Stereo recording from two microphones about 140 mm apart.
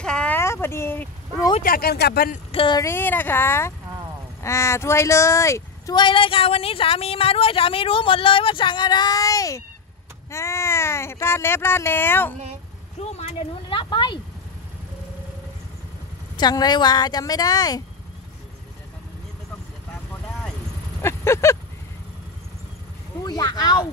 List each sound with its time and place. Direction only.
0.0 s a sound: 5° left (ahead or behind)
0.4 s vehicle: 20° left (ahead or behind)
1.6 s speech: 90° left
2.5 s speech: 35° left (ahead or behind)
2.8 s speech: 15° left (ahead or behind)
13.1 s speech: 40° left (ahead or behind)
16.3 s speech: 30° left (ahead or behind)
21.0 s a sound: 20° left (ahead or behind)
23.2 s speech: 25° left (ahead or behind)